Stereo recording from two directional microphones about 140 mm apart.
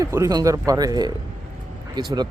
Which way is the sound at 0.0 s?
20° right (ahead or behind).